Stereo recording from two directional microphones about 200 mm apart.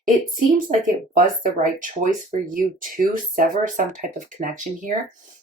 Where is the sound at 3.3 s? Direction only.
40° right (ahead or behind).